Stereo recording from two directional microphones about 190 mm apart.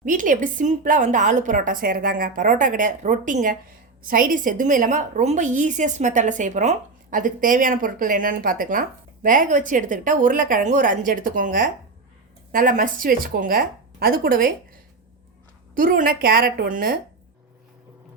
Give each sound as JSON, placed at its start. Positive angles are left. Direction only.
{"t": 0.0, "sound": "a woman's voice", "side_deg": -45}
{"t": 15.7, "sound": "a woman's voice", "side_deg": -45}